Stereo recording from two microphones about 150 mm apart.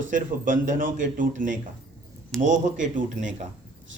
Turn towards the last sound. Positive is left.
turn(degrees=-55)  # may be behind; listen again after turning